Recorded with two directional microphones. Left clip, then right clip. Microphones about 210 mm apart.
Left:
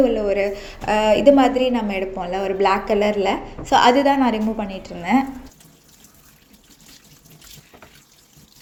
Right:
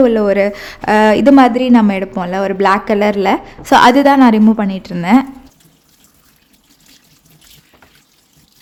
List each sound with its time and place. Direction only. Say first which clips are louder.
0.0 s a woman's voice: right 7 dB; 30° right (ahead or behind)